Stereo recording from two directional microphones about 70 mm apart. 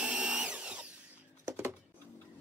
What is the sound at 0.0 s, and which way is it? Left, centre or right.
Tools, centre.